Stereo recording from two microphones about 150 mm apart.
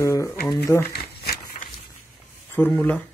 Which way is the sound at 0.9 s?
90° left.